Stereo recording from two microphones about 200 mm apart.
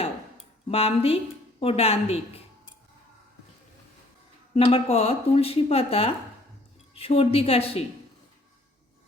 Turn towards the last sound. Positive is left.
turn(degrees=30)  # may be behind; listen again after turning